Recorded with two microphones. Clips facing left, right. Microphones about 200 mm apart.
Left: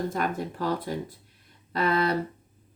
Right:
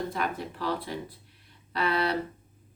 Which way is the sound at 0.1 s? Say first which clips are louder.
Left 3 dB; 45° left (ahead or behind).